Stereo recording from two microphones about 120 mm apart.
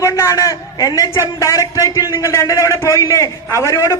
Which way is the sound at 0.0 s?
25° left (ahead or behind).